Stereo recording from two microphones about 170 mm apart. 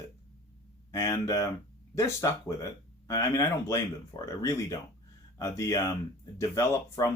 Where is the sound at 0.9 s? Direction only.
20° left (ahead or behind).